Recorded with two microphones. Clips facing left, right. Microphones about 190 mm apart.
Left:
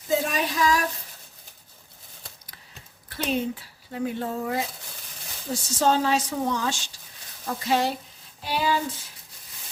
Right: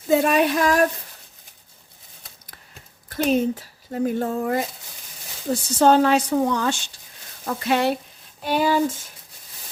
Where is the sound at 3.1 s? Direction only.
45° right (ahead or behind).